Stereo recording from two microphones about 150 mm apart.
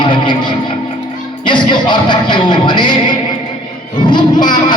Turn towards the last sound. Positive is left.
turn(degrees=30)  # may be behind; listen again after turning